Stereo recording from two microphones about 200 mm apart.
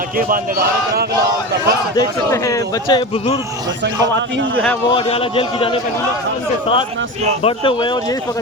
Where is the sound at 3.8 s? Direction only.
60° right (ahead or behind).